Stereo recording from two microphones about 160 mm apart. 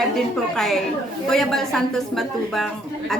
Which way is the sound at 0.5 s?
Centre (ahead or behind).